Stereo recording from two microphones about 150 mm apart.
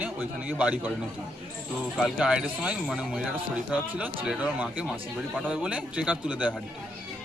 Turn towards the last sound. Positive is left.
turn(degrees=-10)  # may be behind; listen again after turning